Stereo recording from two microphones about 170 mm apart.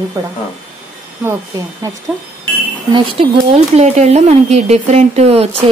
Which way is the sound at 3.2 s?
35° right (ahead or behind).